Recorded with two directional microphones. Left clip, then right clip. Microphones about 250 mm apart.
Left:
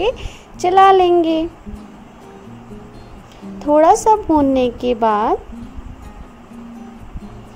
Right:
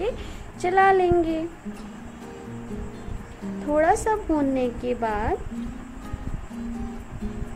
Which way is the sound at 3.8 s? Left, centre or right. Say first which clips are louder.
Left 10 dB; left.